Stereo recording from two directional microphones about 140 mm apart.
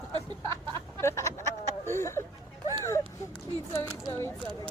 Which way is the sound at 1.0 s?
20° left (ahead or behind).